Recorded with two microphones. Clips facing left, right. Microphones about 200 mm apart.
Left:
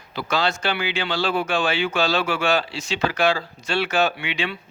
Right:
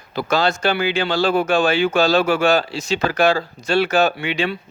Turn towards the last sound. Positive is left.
turn(degrees=-40)  # may be behind; listen again after turning